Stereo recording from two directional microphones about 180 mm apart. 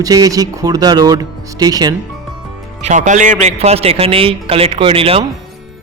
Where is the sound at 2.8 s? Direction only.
45° right (ahead or behind).